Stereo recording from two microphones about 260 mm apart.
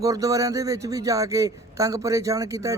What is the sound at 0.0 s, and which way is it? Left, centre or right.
A man's voice, centre.